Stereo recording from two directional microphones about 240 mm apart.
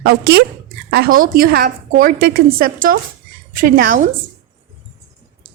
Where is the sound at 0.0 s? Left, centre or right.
Right.